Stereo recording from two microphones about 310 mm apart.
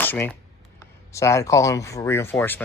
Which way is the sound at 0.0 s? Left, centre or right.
Centre.